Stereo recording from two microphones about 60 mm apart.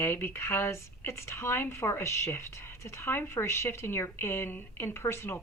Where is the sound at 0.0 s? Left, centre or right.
Left.